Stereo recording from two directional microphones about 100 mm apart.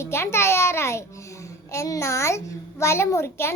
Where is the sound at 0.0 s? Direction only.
25° left (ahead or behind).